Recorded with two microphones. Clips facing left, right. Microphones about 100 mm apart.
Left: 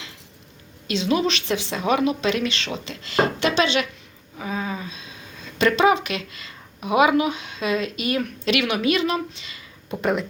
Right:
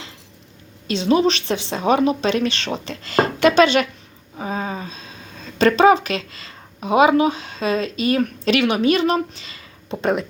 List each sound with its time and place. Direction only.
0.9 s a woman's voice: 35° right (ahead or behind)
4.4 s speech: 35° right (ahead or behind)
10.0 s speech: 20° right (ahead or behind)